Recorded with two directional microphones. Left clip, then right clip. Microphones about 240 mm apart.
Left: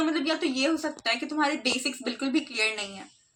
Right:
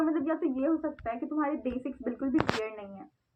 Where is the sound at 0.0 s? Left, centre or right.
Left.